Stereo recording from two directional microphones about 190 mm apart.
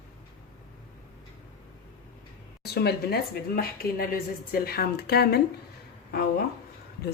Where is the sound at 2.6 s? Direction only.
60° left (ahead or behind).